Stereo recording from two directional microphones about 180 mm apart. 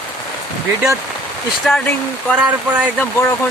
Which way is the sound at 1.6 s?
5° left (ahead or behind).